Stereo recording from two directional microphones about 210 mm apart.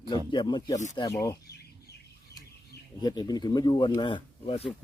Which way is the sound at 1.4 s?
50° left (ahead or behind).